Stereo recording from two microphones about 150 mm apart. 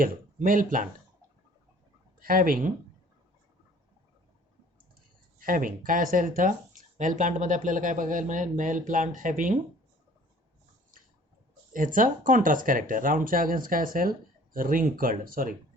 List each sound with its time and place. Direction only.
0.0 s speech: 65° right (ahead or behind)
2.1 s speech: 70° right (ahead or behind)
5.4 s speech: 65° right (ahead or behind)
11.7 s speech: 65° right (ahead or behind)